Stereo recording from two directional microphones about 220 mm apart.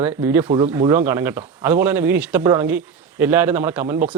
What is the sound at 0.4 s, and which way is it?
Speech, 20° right (ahead or behind).